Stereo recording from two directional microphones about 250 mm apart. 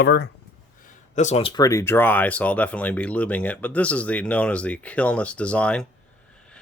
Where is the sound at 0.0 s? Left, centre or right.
Left.